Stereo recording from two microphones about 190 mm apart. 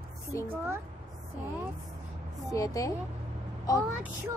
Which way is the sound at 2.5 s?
15° left (ahead or behind).